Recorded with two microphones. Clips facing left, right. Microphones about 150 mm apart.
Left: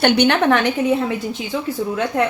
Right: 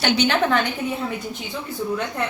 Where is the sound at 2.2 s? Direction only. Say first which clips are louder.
Left 7 dB; 90° left.